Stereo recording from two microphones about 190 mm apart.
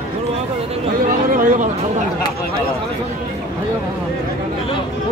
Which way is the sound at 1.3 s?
45° right (ahead or behind).